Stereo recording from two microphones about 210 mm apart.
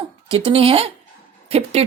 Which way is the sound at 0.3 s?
25° right (ahead or behind).